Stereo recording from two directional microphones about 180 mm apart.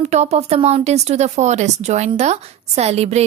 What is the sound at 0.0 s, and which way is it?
A woman's voice, 35° right (ahead or behind).